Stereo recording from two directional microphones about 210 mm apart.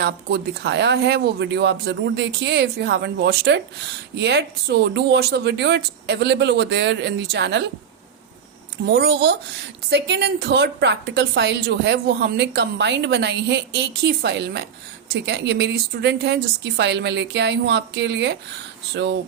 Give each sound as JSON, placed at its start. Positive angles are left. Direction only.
{"t": 0.0, "sound": "speech", "side_deg": -50}
{"t": 8.9, "sound": "a woman's voice", "side_deg": -50}